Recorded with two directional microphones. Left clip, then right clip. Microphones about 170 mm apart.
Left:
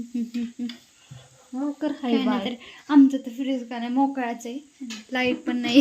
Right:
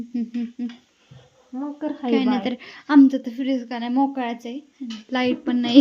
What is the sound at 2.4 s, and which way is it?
A woman's voice, 35° right (ahead or behind).